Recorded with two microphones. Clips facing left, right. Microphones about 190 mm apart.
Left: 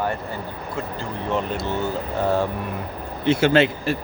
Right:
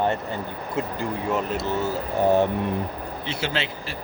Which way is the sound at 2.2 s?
15° right (ahead or behind).